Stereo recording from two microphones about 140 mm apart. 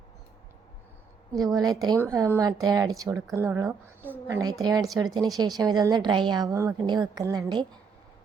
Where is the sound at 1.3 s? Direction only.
25° right (ahead or behind).